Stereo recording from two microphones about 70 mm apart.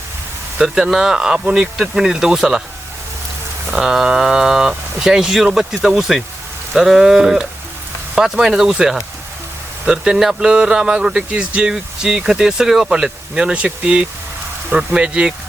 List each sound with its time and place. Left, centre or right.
0.6 s a man's voice: centre
3.7 s a man's voice: centre